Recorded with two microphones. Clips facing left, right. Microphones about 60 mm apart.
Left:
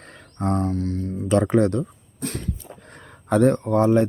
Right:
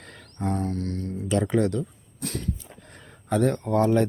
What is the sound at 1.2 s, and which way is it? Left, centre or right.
Speech, left.